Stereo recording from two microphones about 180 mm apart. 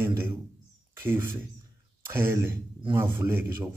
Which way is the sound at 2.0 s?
15° right (ahead or behind).